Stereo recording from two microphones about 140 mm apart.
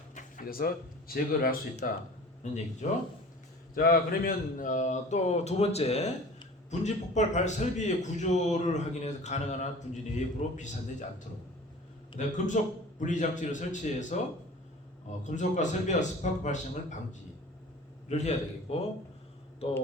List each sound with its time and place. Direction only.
0.1 s speech: 65° left (ahead or behind); by 1.9 s 85° left
2.4 s a man's voice: 60° left (ahead or behind)
3.8 s a man's voice: 90° left; by 10.7 s 60° left (ahead or behind)
12.2 s a man's voice: 60° left (ahead or behind)
15.2 s a man's voice: 60° left (ahead or behind)